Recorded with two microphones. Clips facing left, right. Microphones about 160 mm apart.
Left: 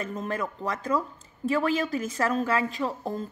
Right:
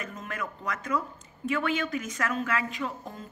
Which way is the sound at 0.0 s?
35° left (ahead or behind).